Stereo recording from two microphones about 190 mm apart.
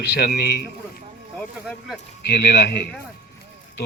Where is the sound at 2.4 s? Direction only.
55° left (ahead or behind).